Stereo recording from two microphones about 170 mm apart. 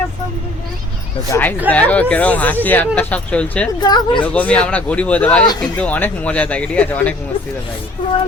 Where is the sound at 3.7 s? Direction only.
25° left (ahead or behind).